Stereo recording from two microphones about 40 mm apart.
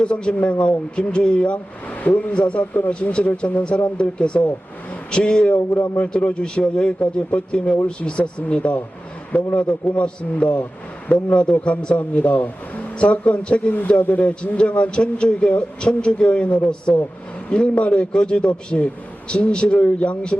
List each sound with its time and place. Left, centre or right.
0.0 s a man's voice: left
0.9 s a man's voice: left